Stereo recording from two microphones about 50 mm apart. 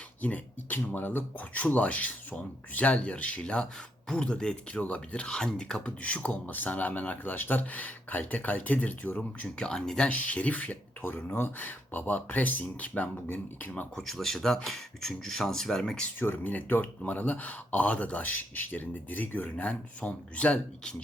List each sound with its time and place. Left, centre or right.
0.2 s speech: left; by 5.9 s centre
6.0 s speech: left
9.6 s speech: centre
10.1 s speech: left
11.3 s speech: left
13.9 s speech: centre
16.2 s speech: left